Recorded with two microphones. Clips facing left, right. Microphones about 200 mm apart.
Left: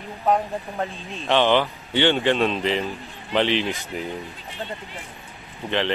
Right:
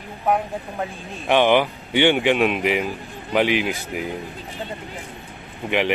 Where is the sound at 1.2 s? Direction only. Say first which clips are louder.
Right 2 dB; 15° right (ahead or behind).